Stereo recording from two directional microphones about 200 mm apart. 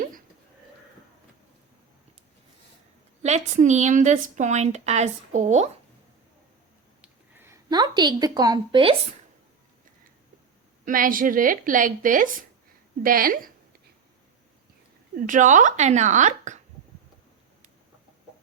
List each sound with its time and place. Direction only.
3.2 s a woman's voice: 35° right (ahead or behind)
7.0 s a sound: 10° right (ahead or behind)
10.8 s speech: 45° right (ahead or behind)
15.1 s a woman's voice: 40° right (ahead or behind)